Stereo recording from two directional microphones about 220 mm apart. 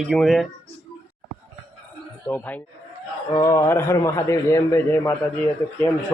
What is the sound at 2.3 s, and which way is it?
A man's voice, 10° left (ahead or behind).